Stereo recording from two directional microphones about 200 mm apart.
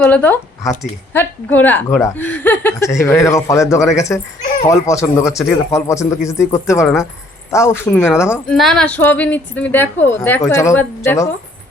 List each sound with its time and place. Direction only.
0.0 s speech: 10° left (ahead or behind)
4.4 s a sound: 40° left (ahead or behind)
4.7 s speech: 15° left (ahead or behind)
8.5 s speech: centre (ahead or behind)